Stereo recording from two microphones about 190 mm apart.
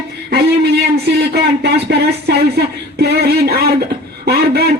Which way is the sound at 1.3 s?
60° right (ahead or behind).